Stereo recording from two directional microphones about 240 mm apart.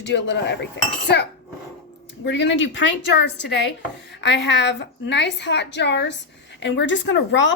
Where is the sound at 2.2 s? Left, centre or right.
Left.